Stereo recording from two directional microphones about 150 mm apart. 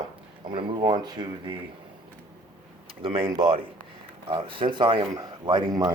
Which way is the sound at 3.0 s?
35° right (ahead or behind).